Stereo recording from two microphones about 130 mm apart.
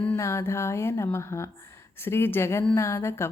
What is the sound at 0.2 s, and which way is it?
Speech, 20° left (ahead or behind).